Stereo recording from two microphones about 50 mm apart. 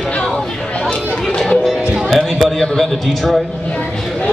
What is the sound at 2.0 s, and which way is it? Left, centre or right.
A man's voice, centre.